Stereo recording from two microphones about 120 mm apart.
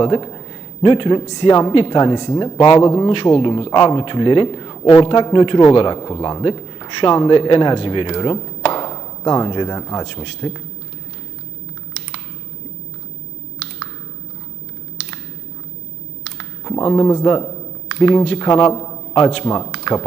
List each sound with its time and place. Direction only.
0.0 s a man's voice: 40° left (ahead or behind)
2.8 s a man's voice: 35° left (ahead or behind)
3.1 s a man's voice: 50° left (ahead or behind)
8.7 s a sound: 40° left (ahead or behind)
16.4 s a sound: 40° left (ahead or behind)
17.9 s a man's voice: 45° left (ahead or behind); by 19.2 s 30° left (ahead or behind)
19.2 s a man's voice: 45° left (ahead or behind)
19.8 s typing: 45° left (ahead or behind)